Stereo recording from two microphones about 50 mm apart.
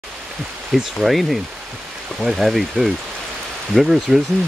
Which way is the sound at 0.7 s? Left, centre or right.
Centre.